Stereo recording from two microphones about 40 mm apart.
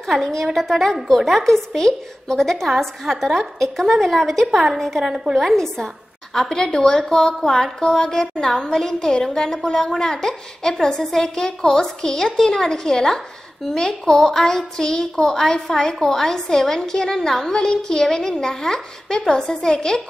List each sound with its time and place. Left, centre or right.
0.0 s a woman's voice: centre
6.5 s a woman's voice: centre